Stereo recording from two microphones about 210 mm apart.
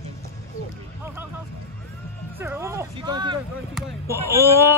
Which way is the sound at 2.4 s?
10° right (ahead or behind).